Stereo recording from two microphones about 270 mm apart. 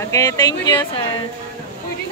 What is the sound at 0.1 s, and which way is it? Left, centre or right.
Speech, centre.